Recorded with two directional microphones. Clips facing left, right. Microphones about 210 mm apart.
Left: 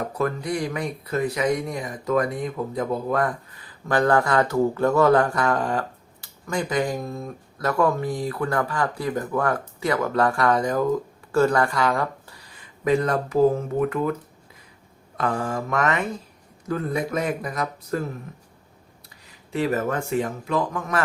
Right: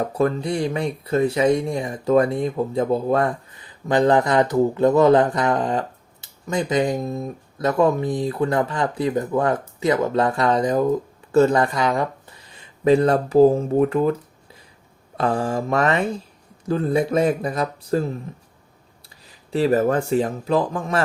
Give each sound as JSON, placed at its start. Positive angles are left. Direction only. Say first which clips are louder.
{"t": 0.1, "sound": "speech", "louder": "right 4 dB", "side_deg": -25}
{"t": 12.8, "sound": "speech", "louder": "right 5 dB", "side_deg": -30}
{"t": 15.2, "sound": "speech", "louder": "right 4 dB", "side_deg": -30}
{"t": 19.5, "sound": "speech", "louder": "right 6 dB", "side_deg": -35}